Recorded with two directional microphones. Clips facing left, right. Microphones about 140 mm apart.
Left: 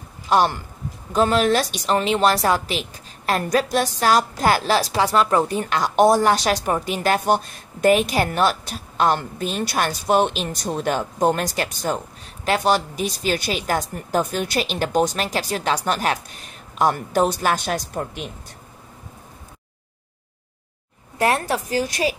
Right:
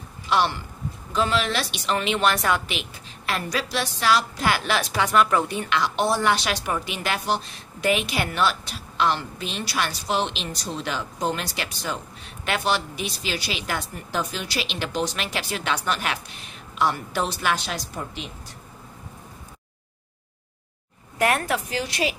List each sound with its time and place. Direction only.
0.3 s a woman's voice: 45° left (ahead or behind)
21.2 s a woman's voice: 30° left (ahead or behind)